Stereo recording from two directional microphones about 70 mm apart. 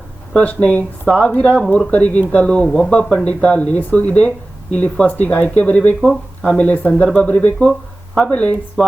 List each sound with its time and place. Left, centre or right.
0.3 s speech: centre